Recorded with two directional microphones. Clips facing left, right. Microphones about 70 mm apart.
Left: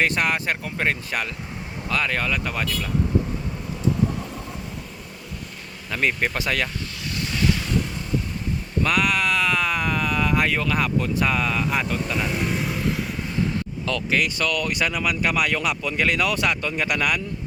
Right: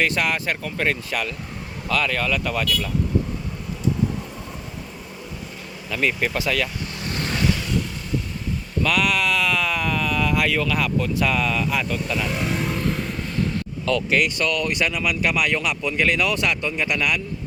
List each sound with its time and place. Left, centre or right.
0.0 s speech: left
5.9 s speech: left
7.0 s vehicle: right
8.8 s speech: left
12.3 s vehicle: centre
13.8 s speech: right
14.8 s speech: left